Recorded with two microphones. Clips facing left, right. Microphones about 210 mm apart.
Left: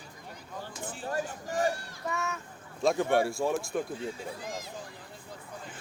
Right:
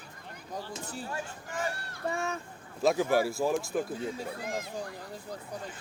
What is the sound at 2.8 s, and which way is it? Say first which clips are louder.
Speech: even; centre (ahead or behind).